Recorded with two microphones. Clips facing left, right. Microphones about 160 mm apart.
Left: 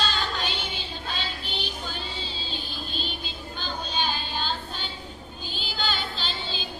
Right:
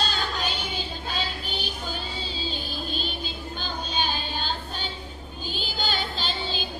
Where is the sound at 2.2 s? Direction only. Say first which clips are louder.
Right 3 dB; 45° right (ahead or behind).